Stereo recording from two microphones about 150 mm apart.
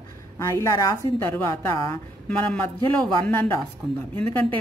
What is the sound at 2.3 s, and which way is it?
A woman's voice, 10° left (ahead or behind).